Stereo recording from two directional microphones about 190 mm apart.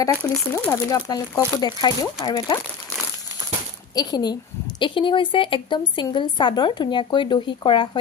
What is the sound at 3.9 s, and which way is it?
Speech, 20° left (ahead or behind).